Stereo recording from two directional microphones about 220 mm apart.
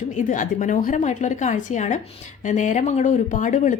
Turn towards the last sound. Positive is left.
turn(degrees=35)  # may be behind; listen again after turning